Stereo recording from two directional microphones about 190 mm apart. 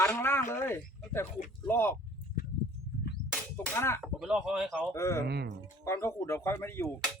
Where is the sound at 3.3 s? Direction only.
10° left (ahead or behind).